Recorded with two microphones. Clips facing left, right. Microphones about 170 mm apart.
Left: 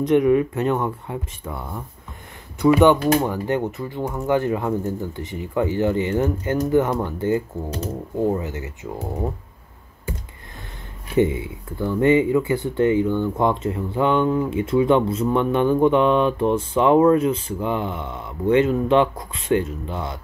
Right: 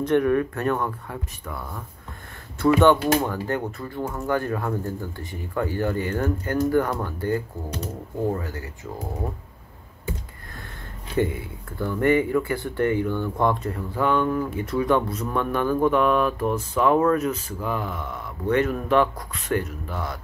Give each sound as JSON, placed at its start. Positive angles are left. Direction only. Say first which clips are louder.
{"t": 0.0, "sound": "speech", "louder": "left 4 dB", "side_deg": 15}
{"t": 11.1, "sound": "speech", "louder": "left 5 dB", "side_deg": 20}